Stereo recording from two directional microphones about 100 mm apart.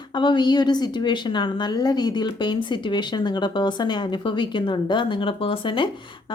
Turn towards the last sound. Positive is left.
turn(degrees=60)  # may be behind; listen again after turning